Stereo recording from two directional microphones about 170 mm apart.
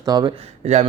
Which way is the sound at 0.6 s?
40° right (ahead or behind).